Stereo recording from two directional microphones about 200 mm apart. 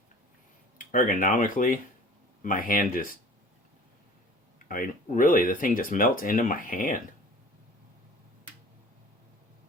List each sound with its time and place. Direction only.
0.8 s speech: 40° left (ahead or behind)
4.7 s speech: 40° left (ahead or behind)